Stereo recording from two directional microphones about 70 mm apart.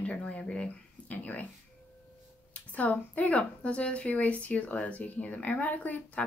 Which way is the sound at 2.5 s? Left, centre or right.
Left.